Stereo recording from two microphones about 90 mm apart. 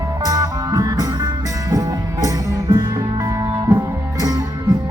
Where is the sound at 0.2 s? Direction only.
45° right (ahead or behind).